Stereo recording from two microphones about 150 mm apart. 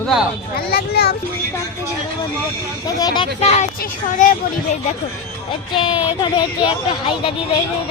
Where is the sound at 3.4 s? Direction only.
45° left (ahead or behind).